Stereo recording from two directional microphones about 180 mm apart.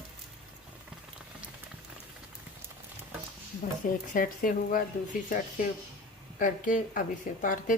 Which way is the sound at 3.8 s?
50° left (ahead or behind).